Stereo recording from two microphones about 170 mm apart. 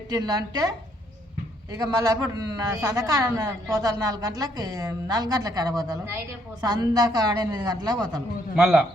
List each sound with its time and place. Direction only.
0.1 s a woman's voice: 25° right (ahead or behind)
1.7 s a woman's voice: 20° right (ahead or behind)
8.5 s a man's voice: centre (ahead or behind)